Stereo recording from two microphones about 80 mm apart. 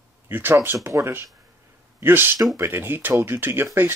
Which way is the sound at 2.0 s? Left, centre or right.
Right.